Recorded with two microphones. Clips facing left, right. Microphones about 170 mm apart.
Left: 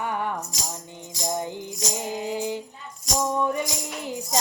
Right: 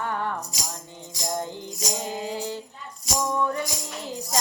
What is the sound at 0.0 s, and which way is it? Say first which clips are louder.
Music: left 1 dB; 15° left (ahead or behind).